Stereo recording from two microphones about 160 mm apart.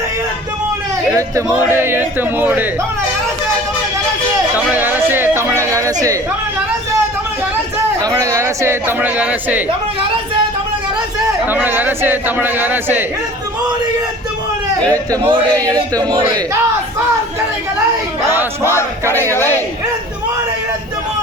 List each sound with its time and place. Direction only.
1.1 s speech: 20° right (ahead or behind)
4.5 s a sound: 10° right (ahead or behind)
8.0 s speech: 20° right (ahead or behind)
11.4 s speech: 10° right (ahead or behind)
14.8 s a man's voice: 20° right (ahead or behind)
18.3 s a sound: 15° right (ahead or behind)
18.7 s speech: 15° left (ahead or behind)